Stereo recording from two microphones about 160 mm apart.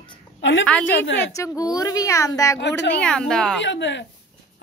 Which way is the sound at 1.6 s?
20° left (ahead or behind).